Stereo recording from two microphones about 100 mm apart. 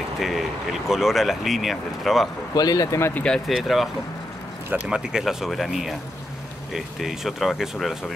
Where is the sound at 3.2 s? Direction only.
5° left (ahead or behind).